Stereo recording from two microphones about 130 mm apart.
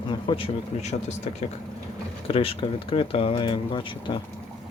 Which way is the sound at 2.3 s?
45° left (ahead or behind).